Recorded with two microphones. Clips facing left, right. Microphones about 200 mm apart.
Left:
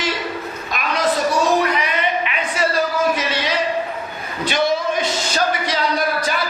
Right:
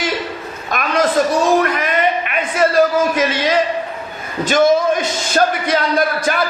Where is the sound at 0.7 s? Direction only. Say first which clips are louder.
Right 4 dB; 50° right (ahead or behind).